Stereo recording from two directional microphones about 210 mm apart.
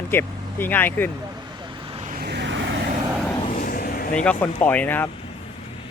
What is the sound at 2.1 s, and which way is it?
Vehicle, 50° right (ahead or behind).